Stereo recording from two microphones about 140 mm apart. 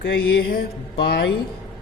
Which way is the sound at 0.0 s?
90° left.